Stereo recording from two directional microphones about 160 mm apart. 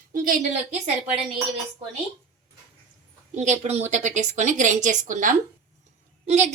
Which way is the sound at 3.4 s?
45° right (ahead or behind).